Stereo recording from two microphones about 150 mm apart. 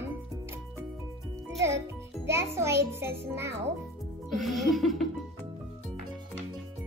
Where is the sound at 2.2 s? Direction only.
20° right (ahead or behind).